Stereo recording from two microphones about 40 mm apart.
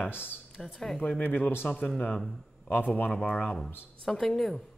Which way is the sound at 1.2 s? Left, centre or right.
Left.